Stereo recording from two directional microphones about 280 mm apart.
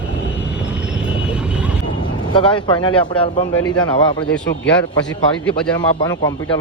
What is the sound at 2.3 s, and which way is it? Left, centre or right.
Speech, centre.